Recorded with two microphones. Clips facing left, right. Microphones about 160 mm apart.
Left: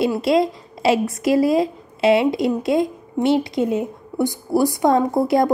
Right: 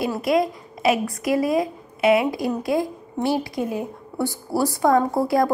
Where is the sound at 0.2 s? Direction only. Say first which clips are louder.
Left 3 dB; 25° left (ahead or behind).